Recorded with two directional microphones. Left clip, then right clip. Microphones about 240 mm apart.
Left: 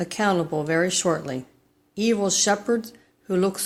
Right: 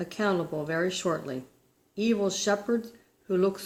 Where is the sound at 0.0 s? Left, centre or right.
Left.